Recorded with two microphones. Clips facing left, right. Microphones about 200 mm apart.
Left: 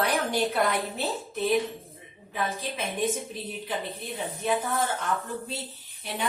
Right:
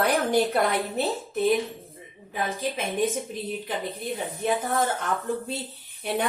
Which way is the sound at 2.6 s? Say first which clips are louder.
Right 4 dB; 50° right (ahead or behind).